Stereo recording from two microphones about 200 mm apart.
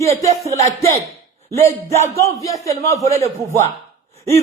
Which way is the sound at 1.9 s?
15° left (ahead or behind).